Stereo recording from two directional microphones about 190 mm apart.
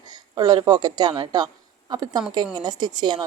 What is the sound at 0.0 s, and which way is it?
A woman's voice, 20° right (ahead or behind).